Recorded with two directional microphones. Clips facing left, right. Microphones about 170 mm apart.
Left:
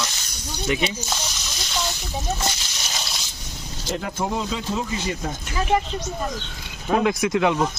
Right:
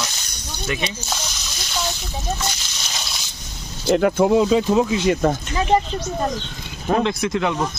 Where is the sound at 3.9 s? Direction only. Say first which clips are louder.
Right 11 dB; 75° right (ahead or behind).